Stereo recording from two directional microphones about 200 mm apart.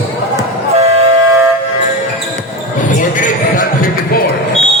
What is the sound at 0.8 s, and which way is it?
Train, 30° right (ahead or behind).